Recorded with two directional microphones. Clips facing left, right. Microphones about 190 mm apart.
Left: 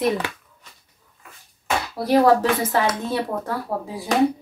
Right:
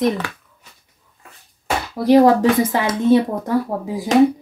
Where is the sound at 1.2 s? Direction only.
35° right (ahead or behind).